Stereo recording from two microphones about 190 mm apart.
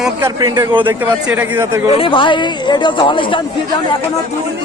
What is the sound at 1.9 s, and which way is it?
Speech, 30° left (ahead or behind).